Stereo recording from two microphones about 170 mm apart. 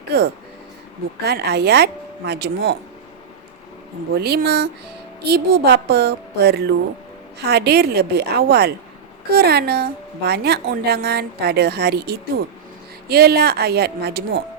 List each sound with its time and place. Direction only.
0.1 s a woman's voice: 70° right (ahead or behind)
4.1 s a woman's voice: 65° right (ahead or behind)